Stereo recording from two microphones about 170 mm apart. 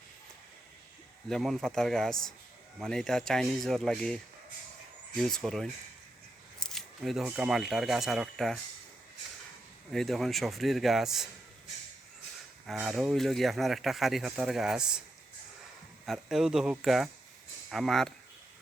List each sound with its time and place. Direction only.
1.3 s speech: centre (ahead or behind)
6.6 s scissors: centre (ahead or behind)
7.3 s speech: 5° right (ahead or behind)
9.9 s speech: centre (ahead or behind)
12.7 s speech: centre (ahead or behind)
16.0 s speech: 5° right (ahead or behind)